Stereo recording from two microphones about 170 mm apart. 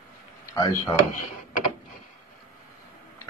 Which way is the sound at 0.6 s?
20° left (ahead or behind).